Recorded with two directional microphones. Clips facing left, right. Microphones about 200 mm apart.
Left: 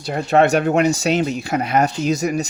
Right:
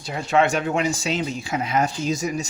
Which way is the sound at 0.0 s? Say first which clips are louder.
Left 5 dB; 55° left (ahead or behind).